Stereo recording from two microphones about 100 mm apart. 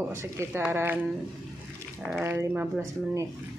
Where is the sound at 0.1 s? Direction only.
30° right (ahead or behind).